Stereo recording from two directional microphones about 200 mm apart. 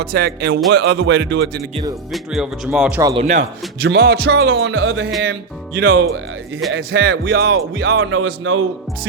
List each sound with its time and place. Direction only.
0.0 s music: 55° right (ahead or behind)
2.1 s speech: centre (ahead or behind)
3.2 s speech: 35° right (ahead or behind)
3.8 s music: 55° right (ahead or behind); by 5.1 s 70° right (ahead or behind)
5.7 s speech: 50° right (ahead or behind)
6.7 s music: 70° right (ahead or behind); by 7.5 s 55° right (ahead or behind)
7.9 s a man's voice: 80° right